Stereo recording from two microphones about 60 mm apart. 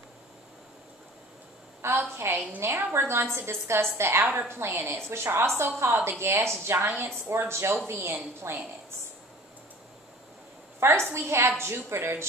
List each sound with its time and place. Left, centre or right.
1.8 s a woman's voice: right
8.4 s a woman's voice: right
11.1 s a woman's voice: right